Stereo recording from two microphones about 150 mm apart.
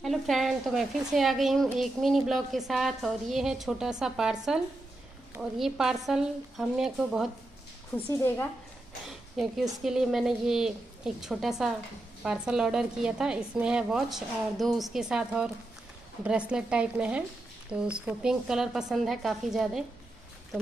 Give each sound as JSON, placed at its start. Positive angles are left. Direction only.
{"t": 0.0, "sound": "a woman's voice", "side_deg": 0}
{"t": 7.9, "sound": "a woman's voice", "side_deg": 15}
{"t": 9.4, "sound": "a woman's voice", "side_deg": -5}